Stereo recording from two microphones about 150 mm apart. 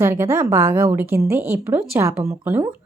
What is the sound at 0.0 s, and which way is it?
A woman's voice, 15° right (ahead or behind).